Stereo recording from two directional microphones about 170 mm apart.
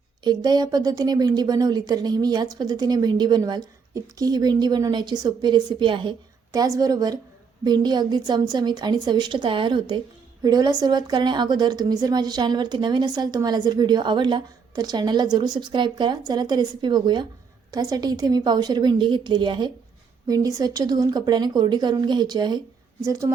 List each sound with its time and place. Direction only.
0.3 s a woman's voice: 25° right (ahead or behind)